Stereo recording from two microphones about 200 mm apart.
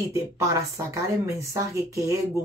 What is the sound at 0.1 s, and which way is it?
Speech, 15° right (ahead or behind).